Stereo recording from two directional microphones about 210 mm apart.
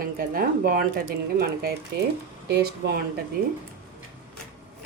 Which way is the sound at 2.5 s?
50° right (ahead or behind).